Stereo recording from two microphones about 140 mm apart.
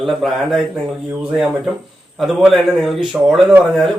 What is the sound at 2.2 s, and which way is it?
Speech, centre (ahead or behind).